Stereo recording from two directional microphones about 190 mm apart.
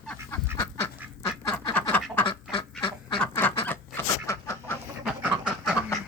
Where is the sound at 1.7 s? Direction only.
10° left (ahead or behind).